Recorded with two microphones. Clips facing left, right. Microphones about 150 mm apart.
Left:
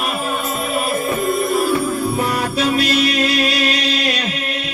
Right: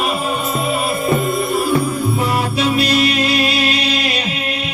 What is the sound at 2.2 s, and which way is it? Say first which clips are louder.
Music: right 1 dB; 45° left (ahead or behind).